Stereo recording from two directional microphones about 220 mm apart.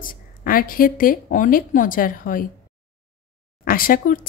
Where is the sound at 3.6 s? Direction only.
40° left (ahead or behind).